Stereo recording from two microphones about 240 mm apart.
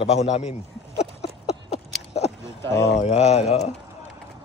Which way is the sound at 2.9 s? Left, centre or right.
Left.